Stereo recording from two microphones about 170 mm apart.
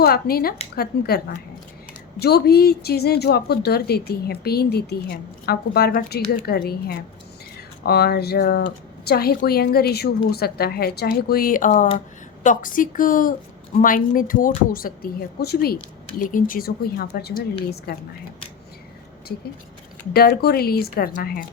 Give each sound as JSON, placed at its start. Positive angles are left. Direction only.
{"t": 0.0, "sound": "a woman's voice", "side_deg": 65}
{"t": 7.9, "sound": "a woman's voice", "side_deg": 65}
{"t": 20.1, "sound": "a woman's voice", "side_deg": 65}